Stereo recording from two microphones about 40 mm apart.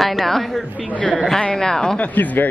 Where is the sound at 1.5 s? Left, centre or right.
Centre.